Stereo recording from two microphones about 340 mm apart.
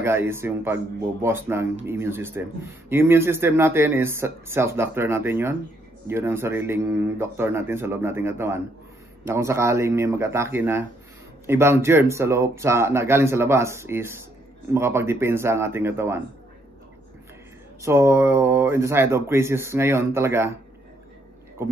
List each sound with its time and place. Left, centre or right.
0.0 s a man's voice: centre
17.8 s a man's voice: centre